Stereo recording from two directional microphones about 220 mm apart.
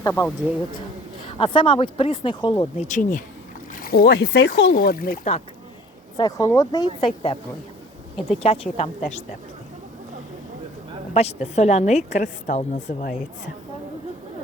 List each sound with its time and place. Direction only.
0.0 s speech: 10° left (ahead or behind)
1.3 s speech: 25° left (ahead or behind)
3.8 s speech: 40° left (ahead or behind)
6.1 s speech: 15° left (ahead or behind)
8.4 s speech: 25° left (ahead or behind)
11.1 s a woman's voice: 30° left (ahead or behind)